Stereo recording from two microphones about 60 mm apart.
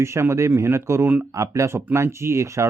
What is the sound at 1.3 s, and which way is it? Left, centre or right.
Speech, right.